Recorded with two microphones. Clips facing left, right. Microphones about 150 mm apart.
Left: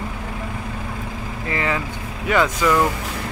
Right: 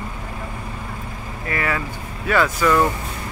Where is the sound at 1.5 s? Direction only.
20° left (ahead or behind).